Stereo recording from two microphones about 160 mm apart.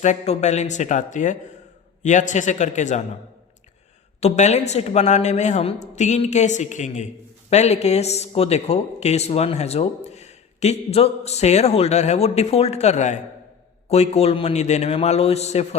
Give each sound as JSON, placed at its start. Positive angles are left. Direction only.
{"t": 0.0, "sound": "speech", "side_deg": 45}
{"t": 4.2, "sound": "a man's voice", "side_deg": 45}